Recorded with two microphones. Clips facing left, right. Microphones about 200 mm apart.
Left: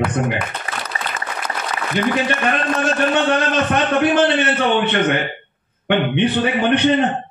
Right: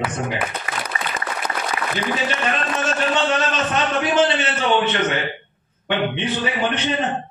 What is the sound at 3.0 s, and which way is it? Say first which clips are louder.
Speech: left 2 dB; 60° left (ahead or behind).